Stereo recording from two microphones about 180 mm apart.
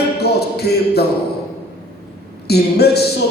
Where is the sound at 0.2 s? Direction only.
65° left (ahead or behind).